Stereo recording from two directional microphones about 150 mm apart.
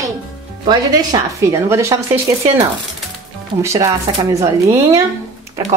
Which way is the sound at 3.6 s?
20° right (ahead or behind).